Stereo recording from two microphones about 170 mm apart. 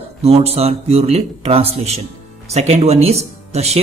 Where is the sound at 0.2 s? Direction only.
35° right (ahead or behind).